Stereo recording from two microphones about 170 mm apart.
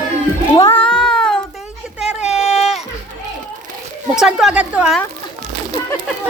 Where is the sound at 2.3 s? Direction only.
40° left (ahead or behind).